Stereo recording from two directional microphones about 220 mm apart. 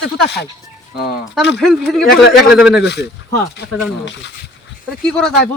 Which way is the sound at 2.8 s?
50° left (ahead or behind).